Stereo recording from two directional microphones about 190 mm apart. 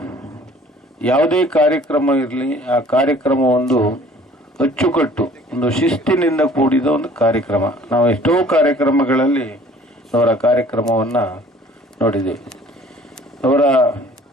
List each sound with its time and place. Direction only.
0.0 s vehicle: 15° left (ahead or behind)
0.9 s a man's voice: 5° left (ahead or behind)